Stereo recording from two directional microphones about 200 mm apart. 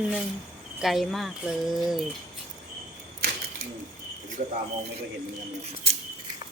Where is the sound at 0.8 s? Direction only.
Centre (ahead or behind).